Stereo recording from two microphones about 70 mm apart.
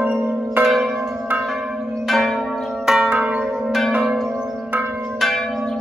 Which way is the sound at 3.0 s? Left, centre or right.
Centre.